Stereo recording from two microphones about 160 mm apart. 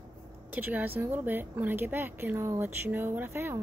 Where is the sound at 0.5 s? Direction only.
10° right (ahead or behind).